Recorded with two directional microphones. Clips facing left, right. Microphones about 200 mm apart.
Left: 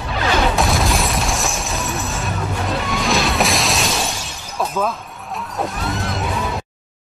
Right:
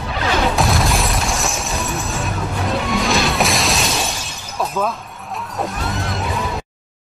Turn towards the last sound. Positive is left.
turn(degrees=0)  # may be behind; listen again after turning